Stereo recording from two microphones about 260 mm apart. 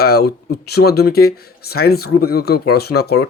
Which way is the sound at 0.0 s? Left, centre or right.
Left.